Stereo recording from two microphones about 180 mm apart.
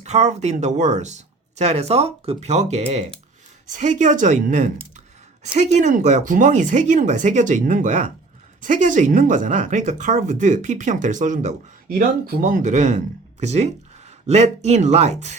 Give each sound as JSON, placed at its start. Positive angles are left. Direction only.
{"t": 0.0, "sound": "speech", "side_deg": -40}
{"t": 11.9, "sound": "speech", "side_deg": -60}